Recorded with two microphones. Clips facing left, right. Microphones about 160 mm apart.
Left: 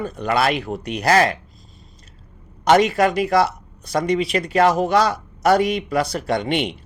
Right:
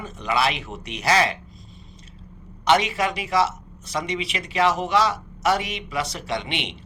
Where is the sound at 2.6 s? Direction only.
45° left (ahead or behind).